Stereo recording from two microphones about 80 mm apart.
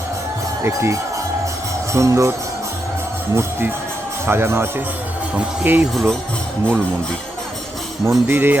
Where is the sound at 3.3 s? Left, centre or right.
Right.